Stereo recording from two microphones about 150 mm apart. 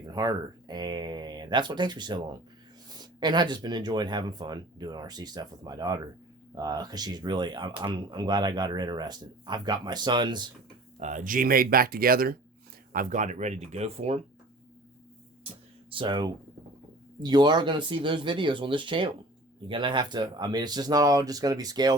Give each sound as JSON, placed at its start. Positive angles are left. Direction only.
{"t": 0.0, "sound": "speech", "side_deg": -25}
{"t": 11.0, "sound": "speech", "side_deg": -60}
{"t": 12.9, "sound": "speech", "side_deg": -65}
{"t": 15.9, "sound": "speech", "side_deg": -35}